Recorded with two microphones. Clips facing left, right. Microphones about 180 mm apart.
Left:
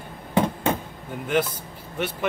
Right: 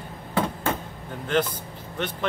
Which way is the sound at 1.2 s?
10° left (ahead or behind).